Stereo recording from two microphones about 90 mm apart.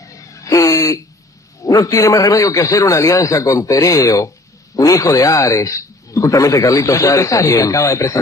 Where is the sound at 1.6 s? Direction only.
40° left (ahead or behind).